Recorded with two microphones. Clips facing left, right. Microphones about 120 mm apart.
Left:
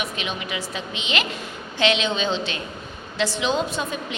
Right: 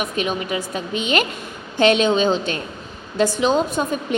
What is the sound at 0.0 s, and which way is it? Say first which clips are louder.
A woman's voice: right 6 dB; 45° right (ahead or behind).